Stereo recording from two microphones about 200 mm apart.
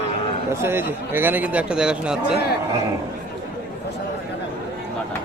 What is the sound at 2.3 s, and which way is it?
Speech, 55° left (ahead or behind).